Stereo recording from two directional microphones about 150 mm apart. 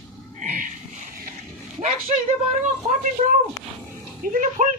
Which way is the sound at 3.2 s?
45° right (ahead or behind).